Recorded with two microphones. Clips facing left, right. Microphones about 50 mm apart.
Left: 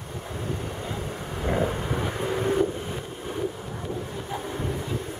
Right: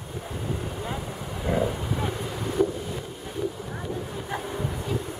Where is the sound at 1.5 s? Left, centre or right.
Left.